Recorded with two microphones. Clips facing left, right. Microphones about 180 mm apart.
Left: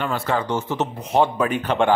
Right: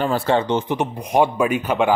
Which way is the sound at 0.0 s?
30° right (ahead or behind).